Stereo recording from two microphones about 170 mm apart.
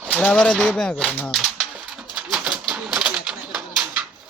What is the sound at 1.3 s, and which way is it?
Pigeon, 5° right (ahead or behind).